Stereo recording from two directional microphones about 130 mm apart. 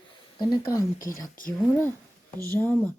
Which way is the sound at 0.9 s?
90° left.